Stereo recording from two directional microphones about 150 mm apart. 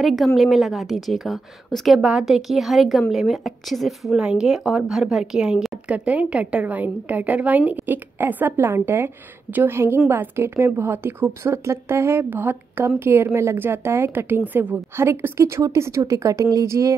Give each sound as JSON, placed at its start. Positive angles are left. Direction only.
{"t": 0.0, "sound": "a woman's voice", "side_deg": 0}